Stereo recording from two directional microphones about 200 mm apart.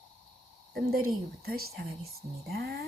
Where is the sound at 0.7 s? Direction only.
50° right (ahead or behind).